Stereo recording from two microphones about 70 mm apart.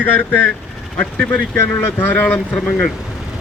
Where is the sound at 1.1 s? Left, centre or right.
Centre.